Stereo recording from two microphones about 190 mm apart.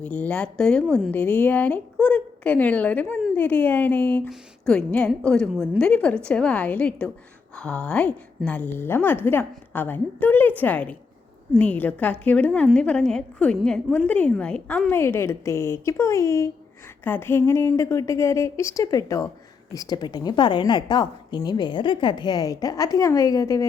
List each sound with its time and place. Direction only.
0.0 s a woman's voice: 5° left (ahead or behind)